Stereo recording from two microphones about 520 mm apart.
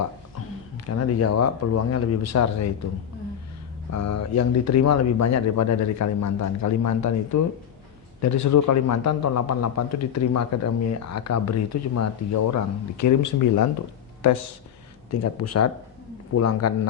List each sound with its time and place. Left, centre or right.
0.9 s speech: left
3.9 s speech: left
15.1 s speech: left